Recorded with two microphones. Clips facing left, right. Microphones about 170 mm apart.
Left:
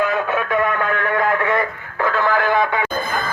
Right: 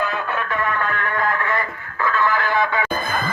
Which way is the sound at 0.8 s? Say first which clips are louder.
Left 4 dB; 55° left (ahead or behind).